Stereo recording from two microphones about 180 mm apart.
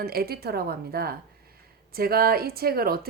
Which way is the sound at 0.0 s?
60° right (ahead or behind).